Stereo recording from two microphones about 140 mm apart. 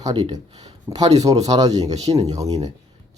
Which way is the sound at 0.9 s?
25° right (ahead or behind).